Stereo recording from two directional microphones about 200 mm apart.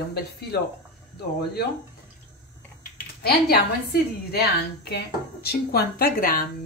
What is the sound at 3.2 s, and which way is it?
Speech, 50° left (ahead or behind).